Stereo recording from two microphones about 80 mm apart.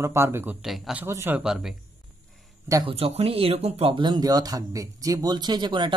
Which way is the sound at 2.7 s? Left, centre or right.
Right.